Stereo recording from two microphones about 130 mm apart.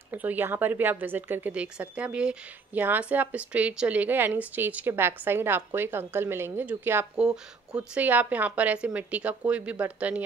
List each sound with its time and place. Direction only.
0.1 s speech: 15° right (ahead or behind)